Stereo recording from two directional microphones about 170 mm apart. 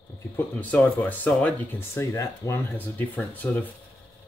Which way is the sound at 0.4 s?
10° left (ahead or behind).